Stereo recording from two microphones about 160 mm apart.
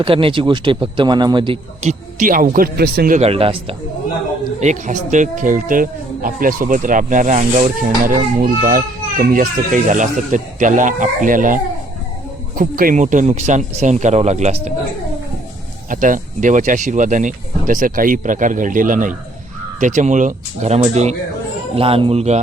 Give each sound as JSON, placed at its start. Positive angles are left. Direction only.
{"t": 0.0, "sound": "speech", "side_deg": -35}
{"t": 1.8, "sound": "a child's voice", "side_deg": -50}
{"t": 3.2, "sound": "speech", "side_deg": -40}
{"t": 4.6, "sound": "a child's voice", "side_deg": -45}
{"t": 7.9, "sound": "a child's voice", "side_deg": -60}
{"t": 15.9, "sound": "speech", "side_deg": -55}